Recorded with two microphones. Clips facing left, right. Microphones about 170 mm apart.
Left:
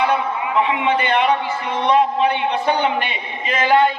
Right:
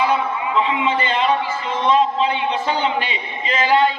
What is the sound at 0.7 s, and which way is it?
A man's voice, 60° left (ahead or behind).